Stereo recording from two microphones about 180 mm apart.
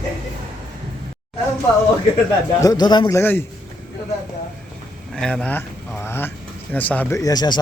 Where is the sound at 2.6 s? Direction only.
20° left (ahead or behind).